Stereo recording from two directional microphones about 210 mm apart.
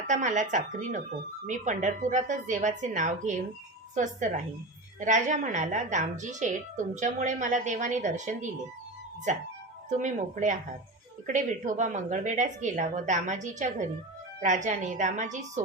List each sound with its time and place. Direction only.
0.1 s speech: 35° right (ahead or behind)